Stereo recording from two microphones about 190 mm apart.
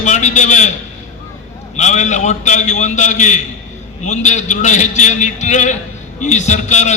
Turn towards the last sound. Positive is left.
turn(degrees=40)  # may be behind; listen again after turning